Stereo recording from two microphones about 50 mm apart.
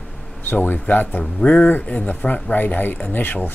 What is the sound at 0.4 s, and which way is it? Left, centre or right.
Speech, left.